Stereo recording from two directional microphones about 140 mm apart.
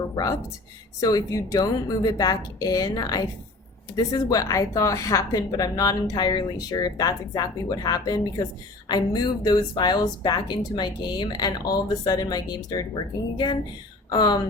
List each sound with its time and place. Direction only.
0.9 s a woman's voice: 25° left (ahead or behind)